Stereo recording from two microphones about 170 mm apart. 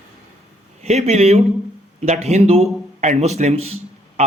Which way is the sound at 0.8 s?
40° right (ahead or behind).